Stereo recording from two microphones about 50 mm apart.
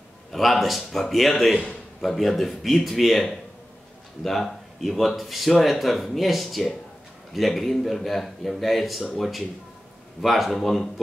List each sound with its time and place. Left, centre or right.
0.3 s speech: centre